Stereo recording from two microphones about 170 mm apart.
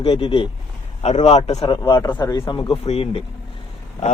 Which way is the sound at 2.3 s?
30° left (ahead or behind).